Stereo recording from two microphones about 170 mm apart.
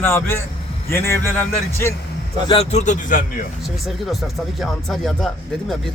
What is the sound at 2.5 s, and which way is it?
Speech, 35° left (ahead or behind).